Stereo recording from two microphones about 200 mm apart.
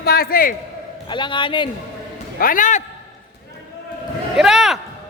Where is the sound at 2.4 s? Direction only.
45° left (ahead or behind).